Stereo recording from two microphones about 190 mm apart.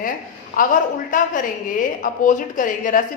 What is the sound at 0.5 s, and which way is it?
Speech, 45° left (ahead or behind).